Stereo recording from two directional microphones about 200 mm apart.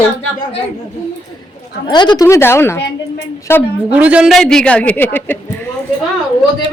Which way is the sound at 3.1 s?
10° left (ahead or behind).